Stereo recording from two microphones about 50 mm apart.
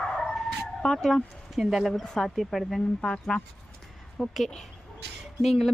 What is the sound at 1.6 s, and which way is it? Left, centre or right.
Speech, centre.